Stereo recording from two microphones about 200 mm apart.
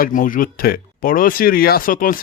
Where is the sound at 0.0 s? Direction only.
45° left (ahead or behind).